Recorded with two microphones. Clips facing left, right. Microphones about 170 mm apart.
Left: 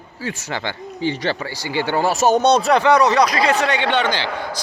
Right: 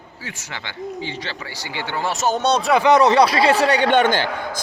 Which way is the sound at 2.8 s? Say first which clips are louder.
Right 1 dB; 25° right (ahead or behind).